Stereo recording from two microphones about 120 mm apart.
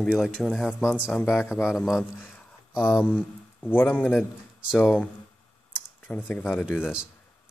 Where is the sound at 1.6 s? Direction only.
Centre (ahead or behind); by 6.8 s 15° left (ahead or behind).